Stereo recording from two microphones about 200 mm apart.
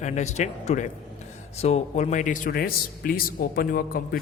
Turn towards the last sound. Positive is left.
turn(degrees=45)  # may be behind; listen again after turning